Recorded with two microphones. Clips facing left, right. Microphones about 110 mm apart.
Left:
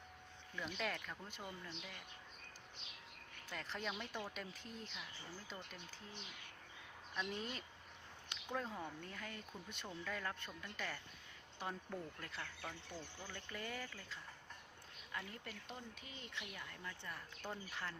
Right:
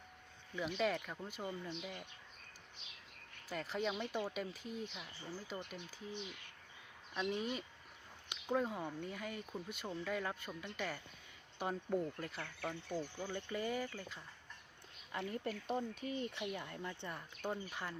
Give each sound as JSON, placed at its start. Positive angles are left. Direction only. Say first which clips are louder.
{"t": 0.5, "sound": "speech", "louder": "right 7 dB", "side_deg": -10}
{"t": 3.5, "sound": "speech", "louder": "right 6 dB", "side_deg": -5}
{"t": 7.2, "sound": "speech", "louder": "right 6 dB", "side_deg": -15}
{"t": 12.9, "sound": "speech", "louder": "right 9 dB", "side_deg": -25}